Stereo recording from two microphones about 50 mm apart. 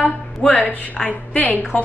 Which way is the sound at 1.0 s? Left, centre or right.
Left.